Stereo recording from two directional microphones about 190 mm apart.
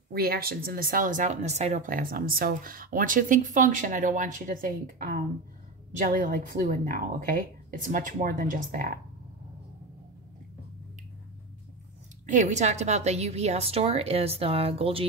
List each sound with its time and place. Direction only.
0.1 s speech: 55° right (ahead or behind)
12.3 s a woman's voice: 40° right (ahead or behind)